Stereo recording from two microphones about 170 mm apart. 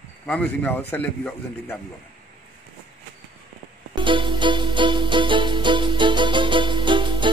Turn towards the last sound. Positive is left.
turn(degrees=-30)  # may be behind; listen again after turning